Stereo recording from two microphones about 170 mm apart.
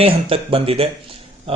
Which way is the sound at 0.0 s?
35° right (ahead or behind).